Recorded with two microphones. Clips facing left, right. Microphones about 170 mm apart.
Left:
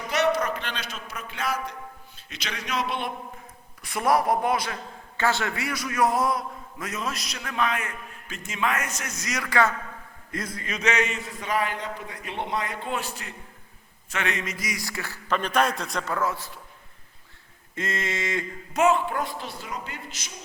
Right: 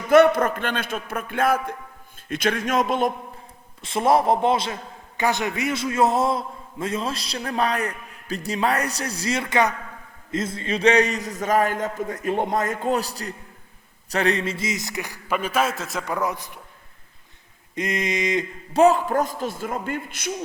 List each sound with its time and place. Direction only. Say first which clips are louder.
0.1 s a man's voice: right 9 dB; 50° right (ahead or behind)
3.8 s a man's voice: right 4 dB; 25° right (ahead or behind); by 16.0 s 5° right (ahead or behind)
16.0 s a man's voice: right 3 dB; 15° right (ahead or behind)
17.7 s a man's voice: right 5 dB; 15° right (ahead or behind)
18.7 s a man's voice: right 5 dB; 35° right (ahead or behind); by 20.3 s 55° right (ahead or behind)